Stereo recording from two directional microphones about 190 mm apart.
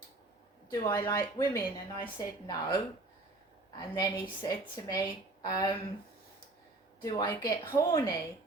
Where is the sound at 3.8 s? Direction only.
20° left (ahead or behind).